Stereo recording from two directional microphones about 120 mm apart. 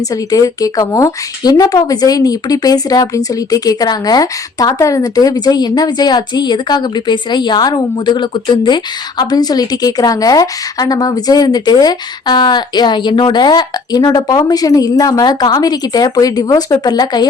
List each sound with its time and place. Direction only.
0.1 s speech: 30° left (ahead or behind)